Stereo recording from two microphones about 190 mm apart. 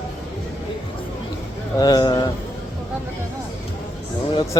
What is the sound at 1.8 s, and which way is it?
Speech, 20° left (ahead or behind).